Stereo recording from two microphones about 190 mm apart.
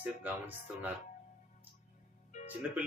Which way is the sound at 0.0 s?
10° right (ahead or behind).